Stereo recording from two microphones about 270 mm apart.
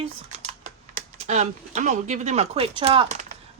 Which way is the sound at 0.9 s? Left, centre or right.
Right.